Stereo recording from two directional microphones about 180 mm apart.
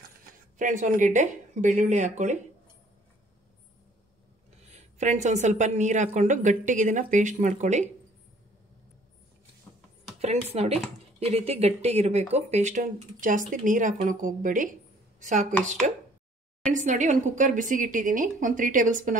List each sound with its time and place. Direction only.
0.6 s a woman's voice: 45° right (ahead or behind)
4.6 s a woman's voice: 40° right (ahead or behind)
10.1 s speech: 35° right (ahead or behind)
15.8 s a woman's voice: 40° right (ahead or behind)